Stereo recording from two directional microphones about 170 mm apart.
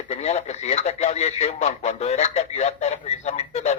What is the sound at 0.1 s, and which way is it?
Speech, 40° left (ahead or behind).